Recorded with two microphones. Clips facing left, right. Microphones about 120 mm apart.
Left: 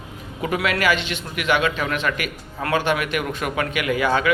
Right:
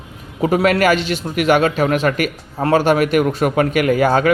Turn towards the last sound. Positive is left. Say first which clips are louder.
# right 6 dB
turn(degrees=-45)  # may be behind; listen again after turning